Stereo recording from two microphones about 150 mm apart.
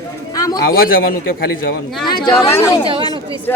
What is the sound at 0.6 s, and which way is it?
A man's voice, 75° left (ahead or behind).